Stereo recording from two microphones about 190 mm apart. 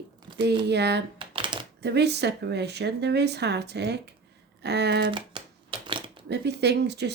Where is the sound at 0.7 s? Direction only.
60° right (ahead or behind).